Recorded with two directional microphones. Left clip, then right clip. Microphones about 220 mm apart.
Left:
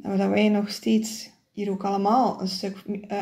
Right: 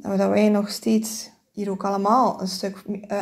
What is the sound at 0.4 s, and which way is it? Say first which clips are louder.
Speech: right 3 dB; 15° right (ahead or behind).